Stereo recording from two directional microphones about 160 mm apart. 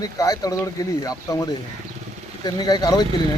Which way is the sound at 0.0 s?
20° left (ahead or behind).